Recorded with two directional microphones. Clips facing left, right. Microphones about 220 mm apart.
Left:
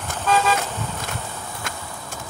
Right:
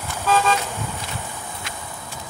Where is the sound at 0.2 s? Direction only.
Centre (ahead or behind).